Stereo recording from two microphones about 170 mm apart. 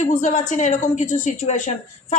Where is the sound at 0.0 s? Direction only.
45° left (ahead or behind).